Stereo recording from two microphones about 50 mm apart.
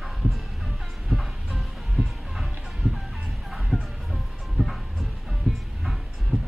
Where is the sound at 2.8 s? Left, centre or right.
Right.